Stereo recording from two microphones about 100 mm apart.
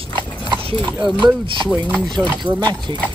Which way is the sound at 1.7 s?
15° right (ahead or behind).